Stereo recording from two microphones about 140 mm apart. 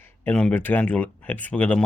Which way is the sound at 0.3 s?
10° left (ahead or behind).